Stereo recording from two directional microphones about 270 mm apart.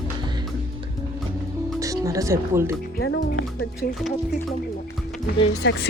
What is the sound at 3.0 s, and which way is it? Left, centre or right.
Speech, left.